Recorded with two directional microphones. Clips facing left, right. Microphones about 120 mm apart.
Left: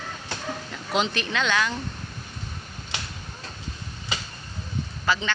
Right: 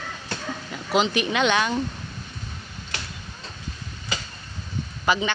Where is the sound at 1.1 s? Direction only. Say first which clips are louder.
Right 4 dB; 15° right (ahead or behind).